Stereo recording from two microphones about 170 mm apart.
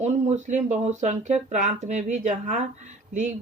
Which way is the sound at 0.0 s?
40° right (ahead or behind).